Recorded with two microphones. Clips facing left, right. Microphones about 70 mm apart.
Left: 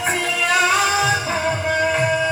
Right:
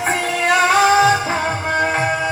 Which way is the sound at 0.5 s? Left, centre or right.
Right.